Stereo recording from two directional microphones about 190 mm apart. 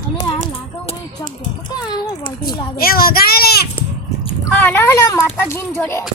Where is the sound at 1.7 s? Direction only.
20° left (ahead or behind).